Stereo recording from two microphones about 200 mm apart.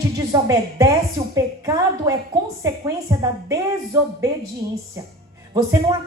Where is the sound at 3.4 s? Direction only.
15° right (ahead or behind).